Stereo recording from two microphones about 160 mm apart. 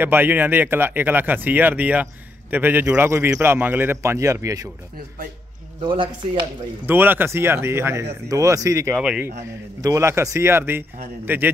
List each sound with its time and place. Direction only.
0.0 s a man's voice: 10° right (ahead or behind)
5.8 s a man's voice: 30° right (ahead or behind)
6.9 s a man's voice: 15° right (ahead or behind)
9.0 s a man's voice: 5° right (ahead or behind)
9.8 s a man's voice: 20° right (ahead or behind)